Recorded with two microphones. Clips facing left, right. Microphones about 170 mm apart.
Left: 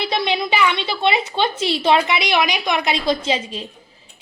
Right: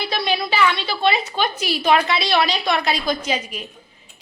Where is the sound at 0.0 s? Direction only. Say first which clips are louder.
Left 2 dB; 20° left (ahead or behind).